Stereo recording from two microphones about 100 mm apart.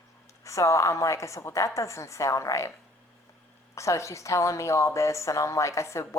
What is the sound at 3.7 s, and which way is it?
A woman's voice, 30° left (ahead or behind).